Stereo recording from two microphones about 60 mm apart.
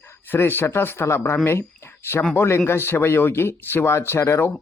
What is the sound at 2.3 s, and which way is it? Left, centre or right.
Speech, left.